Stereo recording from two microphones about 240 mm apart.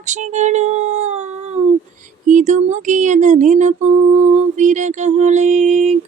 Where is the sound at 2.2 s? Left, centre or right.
Right.